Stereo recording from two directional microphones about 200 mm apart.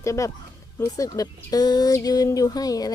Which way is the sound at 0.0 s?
15° left (ahead or behind).